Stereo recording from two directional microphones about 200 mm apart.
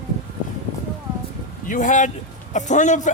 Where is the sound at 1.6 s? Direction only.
40° left (ahead or behind).